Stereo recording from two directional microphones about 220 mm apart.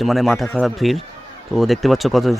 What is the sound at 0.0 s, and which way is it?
Speech, centre (ahead or behind).